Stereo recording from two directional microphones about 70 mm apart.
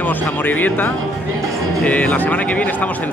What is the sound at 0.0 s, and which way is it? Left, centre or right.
Speech, left.